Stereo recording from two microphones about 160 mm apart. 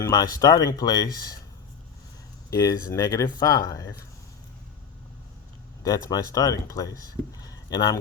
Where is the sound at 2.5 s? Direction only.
20° left (ahead or behind).